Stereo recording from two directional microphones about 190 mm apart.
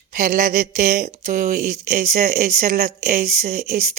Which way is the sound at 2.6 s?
50° right (ahead or behind).